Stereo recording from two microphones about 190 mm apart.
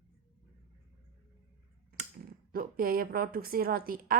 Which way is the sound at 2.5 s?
50° right (ahead or behind).